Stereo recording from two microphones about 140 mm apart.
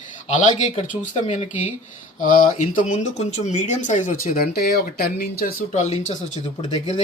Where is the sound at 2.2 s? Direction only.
75° left (ahead or behind).